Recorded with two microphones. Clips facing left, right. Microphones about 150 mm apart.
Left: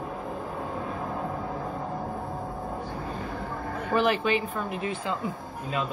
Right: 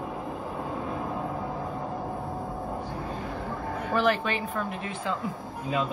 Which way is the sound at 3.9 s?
Centre (ahead or behind).